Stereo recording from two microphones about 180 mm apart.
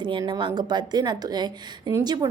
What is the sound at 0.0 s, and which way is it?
A woman's voice, 25° right (ahead or behind).